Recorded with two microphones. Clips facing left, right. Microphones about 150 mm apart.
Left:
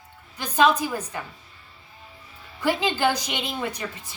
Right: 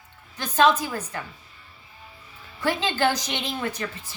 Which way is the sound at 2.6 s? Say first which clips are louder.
Left 1 dB; 15° left (ahead or behind).